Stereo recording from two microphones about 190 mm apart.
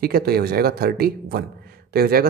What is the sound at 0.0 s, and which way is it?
Speech, 55° right (ahead or behind).